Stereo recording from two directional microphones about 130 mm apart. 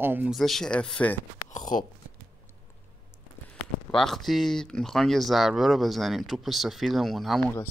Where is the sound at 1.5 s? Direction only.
80° left.